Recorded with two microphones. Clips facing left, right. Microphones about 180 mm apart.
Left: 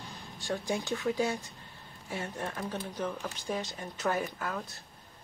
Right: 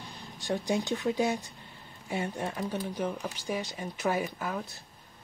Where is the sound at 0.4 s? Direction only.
20° right (ahead or behind).